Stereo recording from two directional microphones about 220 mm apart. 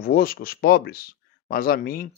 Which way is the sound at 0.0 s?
45° left (ahead or behind).